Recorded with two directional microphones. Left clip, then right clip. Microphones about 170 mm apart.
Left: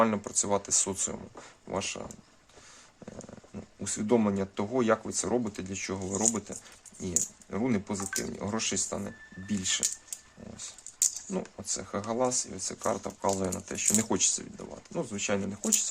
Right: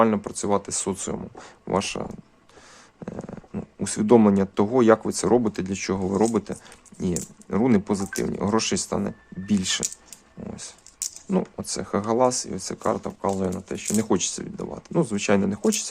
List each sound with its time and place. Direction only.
0.0 s speech: 20° right (ahead or behind); by 2.0 s 40° right (ahead or behind)
3.5 s speech: 40° right (ahead or behind)
11.3 s speech: 40° right (ahead or behind); by 14.1 s 15° right (ahead or behind)
14.1 s speech: 25° right (ahead or behind)
14.6 s speech: 40° right (ahead or behind)